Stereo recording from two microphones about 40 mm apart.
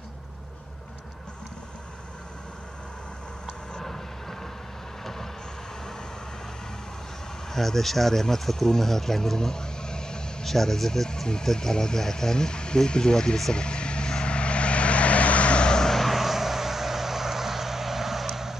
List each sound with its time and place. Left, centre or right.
3.7 s vehicle: centre
7.5 s speech: centre
10.4 s speech: centre
13.5 s vehicle: left
15.9 s vehicle: centre